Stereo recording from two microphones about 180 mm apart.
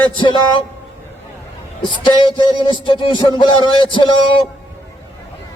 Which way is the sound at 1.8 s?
25° left (ahead or behind).